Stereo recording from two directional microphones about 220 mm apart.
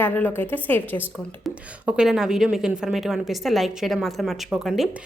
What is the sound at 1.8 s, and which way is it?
Speech, 5° right (ahead or behind).